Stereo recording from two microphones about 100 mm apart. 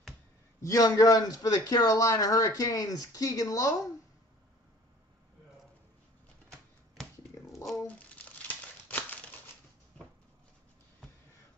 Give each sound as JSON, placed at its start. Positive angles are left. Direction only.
{"t": 0.6, "sound": "a man's voice", "side_deg": 35}
{"t": 7.8, "sound": "crumpling", "side_deg": 15}